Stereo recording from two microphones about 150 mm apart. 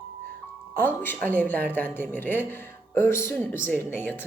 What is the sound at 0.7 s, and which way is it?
Speech, 15° left (ahead or behind).